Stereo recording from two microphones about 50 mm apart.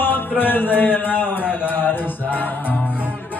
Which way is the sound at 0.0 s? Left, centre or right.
Left.